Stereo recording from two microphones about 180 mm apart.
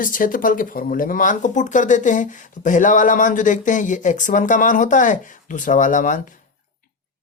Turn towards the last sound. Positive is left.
turn(degrees=45)  # may be behind; listen again after turning